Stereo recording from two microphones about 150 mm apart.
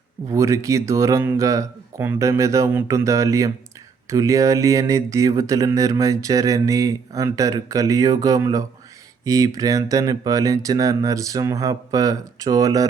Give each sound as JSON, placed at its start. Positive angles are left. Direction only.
{"t": 0.3, "sound": "speech", "side_deg": -20}